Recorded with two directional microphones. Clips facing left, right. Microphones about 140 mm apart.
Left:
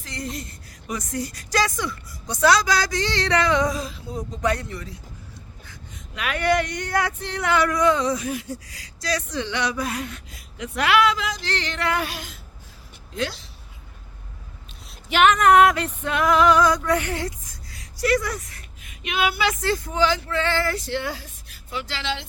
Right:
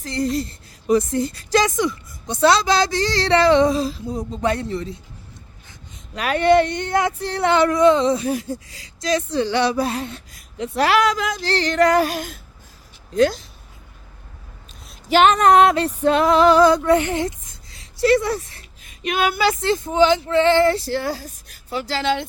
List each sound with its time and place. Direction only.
0.0 s a woman's voice: 35° right (ahead or behind)
3.0 s a woman's voice: 35° right (ahead or behind)
6.1 s a woman's voice: 30° right (ahead or behind)
7.2 s a woman's voice: 35° right (ahead or behind)
9.4 s speech: 35° right (ahead or behind)
15.1 s speech: 35° right (ahead or behind)
16.0 s female singing: 30° right (ahead or behind)
19.6 s speech: 20° right (ahead or behind); by 22.2 s 45° right (ahead or behind)